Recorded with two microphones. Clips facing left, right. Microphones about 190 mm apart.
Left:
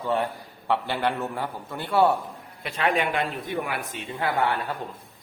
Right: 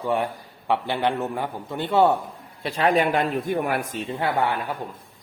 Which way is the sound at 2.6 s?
35° right (ahead or behind).